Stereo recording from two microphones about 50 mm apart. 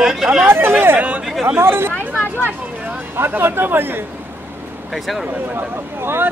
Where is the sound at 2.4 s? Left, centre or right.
Right.